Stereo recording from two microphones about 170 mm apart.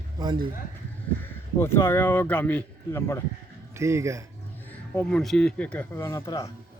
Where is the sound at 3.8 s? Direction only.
15° right (ahead or behind).